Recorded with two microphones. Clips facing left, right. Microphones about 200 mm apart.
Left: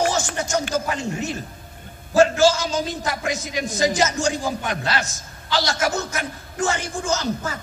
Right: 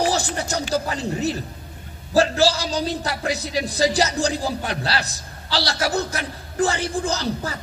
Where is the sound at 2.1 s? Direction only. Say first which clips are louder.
Left 2 dB; 35° right (ahead or behind).